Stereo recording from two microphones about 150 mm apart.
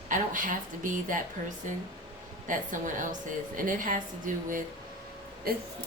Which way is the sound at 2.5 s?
60° right (ahead or behind).